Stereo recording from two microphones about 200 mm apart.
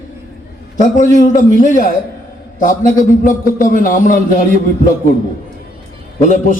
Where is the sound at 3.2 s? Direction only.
40° left (ahead or behind).